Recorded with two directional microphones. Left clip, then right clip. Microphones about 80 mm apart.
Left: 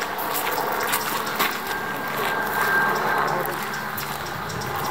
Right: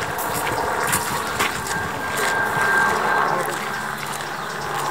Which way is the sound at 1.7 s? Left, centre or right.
Right.